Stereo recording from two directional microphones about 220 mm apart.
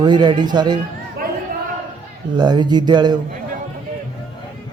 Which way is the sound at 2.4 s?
20° right (ahead or behind).